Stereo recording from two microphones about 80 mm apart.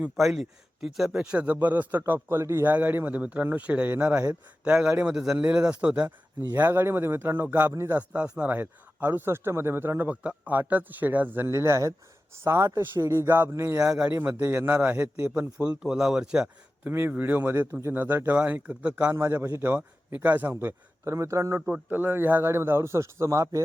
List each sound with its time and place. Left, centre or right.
0.2 s a man's voice: centre
6.5 s a man's voice: right
7.7 s a man's voice: right
7.9 s a man's voice: centre
14.8 s a man's voice: centre
16.8 s a man's voice: right
19.1 s a man's voice: right
21.7 s a man's voice: right